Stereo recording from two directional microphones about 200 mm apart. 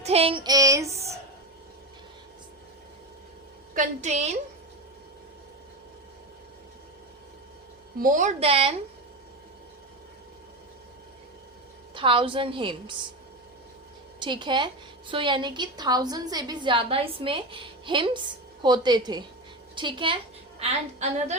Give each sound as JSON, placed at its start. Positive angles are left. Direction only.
{"t": 0.0, "sound": "child singing", "side_deg": -30}
{"t": 3.8, "sound": "a woman's voice", "side_deg": -35}
{"t": 8.0, "sound": "a woman's voice", "side_deg": -40}
{"t": 11.9, "sound": "a woman's voice", "side_deg": -25}
{"t": 14.2, "sound": "a woman's voice", "side_deg": -25}